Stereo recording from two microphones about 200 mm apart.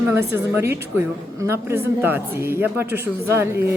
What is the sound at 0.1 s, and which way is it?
A woman's voice, 10° right (ahead or behind).